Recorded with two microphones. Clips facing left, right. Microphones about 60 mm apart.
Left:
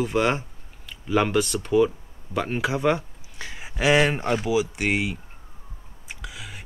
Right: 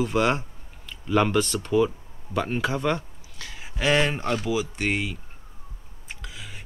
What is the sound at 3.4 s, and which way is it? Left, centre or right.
Speech, left.